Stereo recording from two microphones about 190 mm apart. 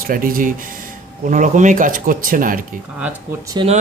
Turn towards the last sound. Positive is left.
turn(degrees=-25)  # may be behind; listen again after turning